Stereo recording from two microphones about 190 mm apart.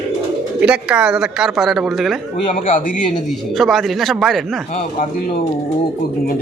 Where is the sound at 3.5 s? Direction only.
Centre (ahead or behind).